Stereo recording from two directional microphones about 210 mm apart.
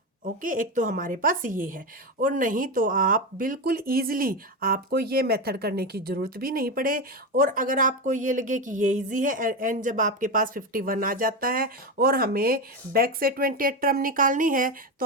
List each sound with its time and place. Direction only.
0.3 s speech: 40° right (ahead or behind)